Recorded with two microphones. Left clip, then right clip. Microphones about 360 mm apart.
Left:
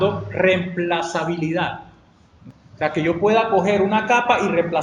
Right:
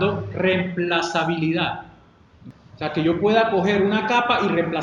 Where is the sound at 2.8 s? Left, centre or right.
Left.